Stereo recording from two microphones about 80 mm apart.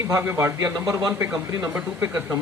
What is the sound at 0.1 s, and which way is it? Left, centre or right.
Speech, right.